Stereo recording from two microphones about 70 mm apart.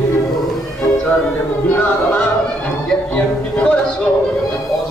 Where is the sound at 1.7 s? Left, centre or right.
Left.